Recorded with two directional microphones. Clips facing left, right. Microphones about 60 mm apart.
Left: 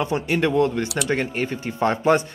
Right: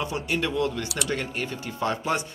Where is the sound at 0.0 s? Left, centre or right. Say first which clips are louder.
Left 6 dB; left.